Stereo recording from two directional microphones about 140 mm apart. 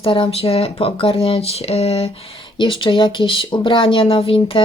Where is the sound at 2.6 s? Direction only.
35° left (ahead or behind).